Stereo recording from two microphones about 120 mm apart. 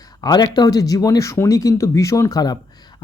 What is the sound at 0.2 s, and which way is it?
Speech, 35° left (ahead or behind).